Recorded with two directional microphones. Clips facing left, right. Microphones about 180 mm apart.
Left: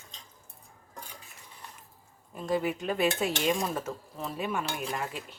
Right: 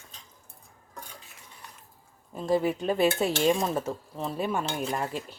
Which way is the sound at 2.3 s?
30° right (ahead or behind).